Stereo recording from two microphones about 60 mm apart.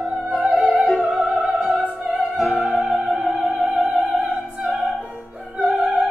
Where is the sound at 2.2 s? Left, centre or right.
Centre.